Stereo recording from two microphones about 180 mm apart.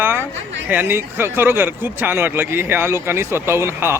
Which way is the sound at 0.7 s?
10° right (ahead or behind).